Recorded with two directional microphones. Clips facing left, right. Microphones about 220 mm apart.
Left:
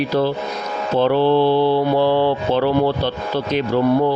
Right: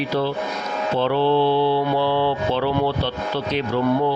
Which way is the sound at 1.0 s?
45° left (ahead or behind).